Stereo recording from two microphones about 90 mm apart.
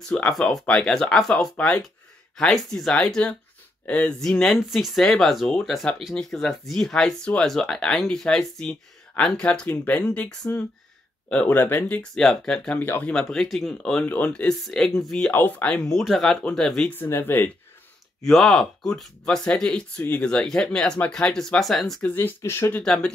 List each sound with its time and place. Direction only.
0.1 s speech: 5° left (ahead or behind); by 12.0 s 20° left (ahead or behind)
12.0 s speech: 5° left (ahead or behind)
13.1 s speech: 5° left (ahead or behind)
14.0 s speech: 15° left (ahead or behind)
15.3 s speech: 15° left (ahead or behind)
16.9 s speech: 25° left (ahead or behind)
18.2 s speech: centre (ahead or behind)
22.1 s speech: 25° left (ahead or behind)
22.8 s speech: 10° left (ahead or behind)